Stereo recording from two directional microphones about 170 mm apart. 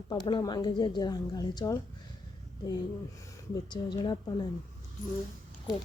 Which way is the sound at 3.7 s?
25° left (ahead or behind).